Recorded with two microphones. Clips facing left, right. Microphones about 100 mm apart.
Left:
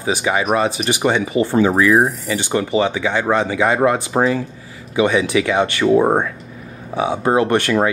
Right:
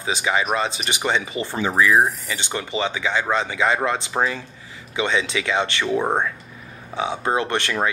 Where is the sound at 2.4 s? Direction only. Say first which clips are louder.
Left 8 dB; 15° left (ahead or behind).